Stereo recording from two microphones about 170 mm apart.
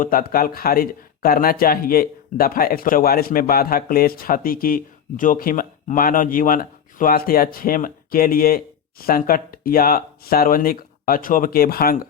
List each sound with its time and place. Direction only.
0.0 s speech: 55° left (ahead or behind)